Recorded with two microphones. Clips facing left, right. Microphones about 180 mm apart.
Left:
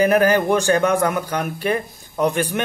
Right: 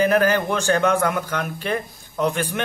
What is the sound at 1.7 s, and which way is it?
Speech, 45° left (ahead or behind).